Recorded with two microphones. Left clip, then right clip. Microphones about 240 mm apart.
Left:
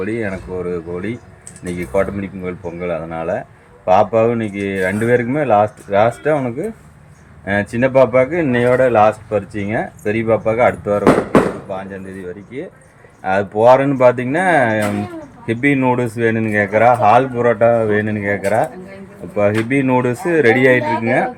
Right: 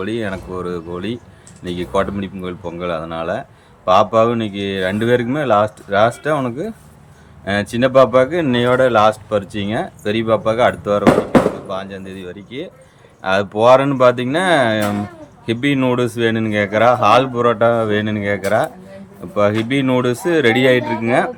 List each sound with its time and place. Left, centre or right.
0.0 s speech: centre